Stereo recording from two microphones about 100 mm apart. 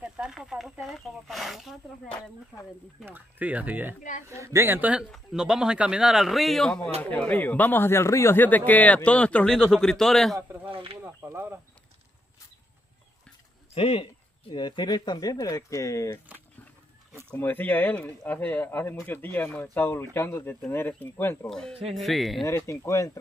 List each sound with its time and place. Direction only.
0.0 s snake: 5° right (ahead or behind)
3.1 s speech: 15° right (ahead or behind)
4.3 s speech: 30° right (ahead or behind)
5.1 s a man's voice: 5° right (ahead or behind)
7.0 s a man's voice: 15° left (ahead or behind)
10.7 s speech: 65° right (ahead or behind)
11.0 s a sound: 25° right (ahead or behind)
13.7 s a sound: 65° left (ahead or behind)
14.5 s speech: 45° left (ahead or behind); by 16.2 s 30° left (ahead or behind)
17.3 s speech: 20° left (ahead or behind)
21.5 s a man's voice: 5° left (ahead or behind)
22.7 s speech: 30° left (ahead or behind)